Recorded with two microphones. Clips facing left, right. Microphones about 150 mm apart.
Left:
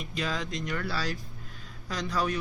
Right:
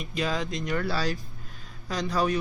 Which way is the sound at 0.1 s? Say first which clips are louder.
Right 4 dB; 15° right (ahead or behind).